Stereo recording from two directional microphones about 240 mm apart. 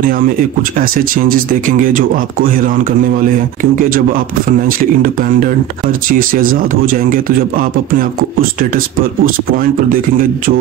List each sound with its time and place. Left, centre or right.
0.0 s a man's voice: right
3.9 s a man's voice: right